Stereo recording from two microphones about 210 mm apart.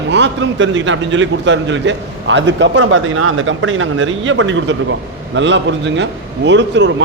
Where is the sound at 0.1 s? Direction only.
60° right (ahead or behind).